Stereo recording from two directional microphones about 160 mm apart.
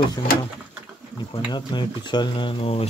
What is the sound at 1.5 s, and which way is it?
Speech, 30° left (ahead or behind).